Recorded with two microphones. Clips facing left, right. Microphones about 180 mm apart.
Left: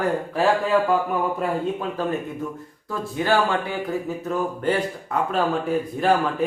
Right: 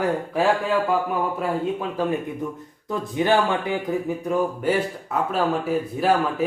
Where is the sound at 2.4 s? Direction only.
15° right (ahead or behind).